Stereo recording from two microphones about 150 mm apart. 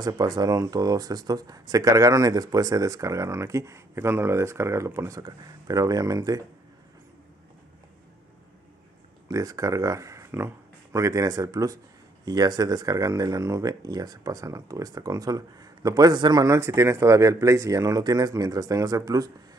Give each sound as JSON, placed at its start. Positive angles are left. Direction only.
{"t": 0.0, "sound": "speech", "side_deg": -25}
{"t": 9.3, "sound": "speech", "side_deg": -25}